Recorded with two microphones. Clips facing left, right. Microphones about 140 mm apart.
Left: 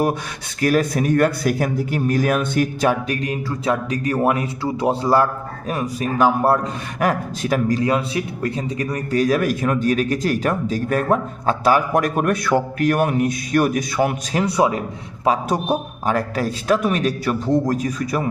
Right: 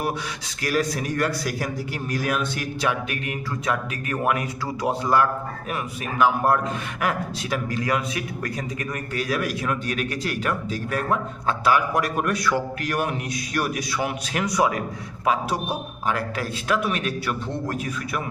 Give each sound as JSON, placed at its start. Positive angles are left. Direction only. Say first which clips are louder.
{"t": 0.6, "sound": "speech", "louder": "left 7 dB", "side_deg": 50}
{"t": 7.8, "sound": "a man's voice", "louder": "left 5 dB", "side_deg": 30}
{"t": 14.3, "sound": "a man's voice", "louder": "left 4 dB", "side_deg": 30}
{"t": 15.4, "sound": "speech", "louder": "left 6 dB", "side_deg": 45}